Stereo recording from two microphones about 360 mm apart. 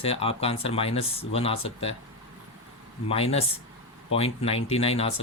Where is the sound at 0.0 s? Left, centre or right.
Centre.